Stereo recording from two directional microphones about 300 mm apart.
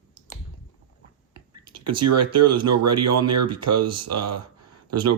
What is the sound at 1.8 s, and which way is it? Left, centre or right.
Speech, right.